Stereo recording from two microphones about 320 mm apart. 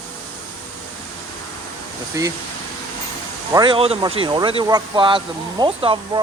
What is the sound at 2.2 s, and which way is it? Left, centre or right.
Speech, centre.